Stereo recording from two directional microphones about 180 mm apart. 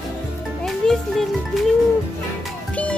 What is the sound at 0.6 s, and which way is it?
Music, centre (ahead or behind).